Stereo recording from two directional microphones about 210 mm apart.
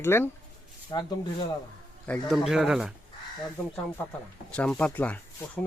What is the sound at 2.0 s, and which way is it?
Speech, centre (ahead or behind).